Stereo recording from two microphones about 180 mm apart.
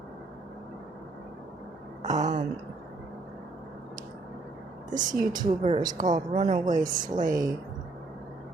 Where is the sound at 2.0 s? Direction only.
40° right (ahead or behind).